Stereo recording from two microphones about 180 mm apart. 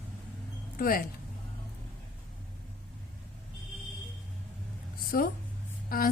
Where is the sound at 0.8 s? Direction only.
55° left (ahead or behind).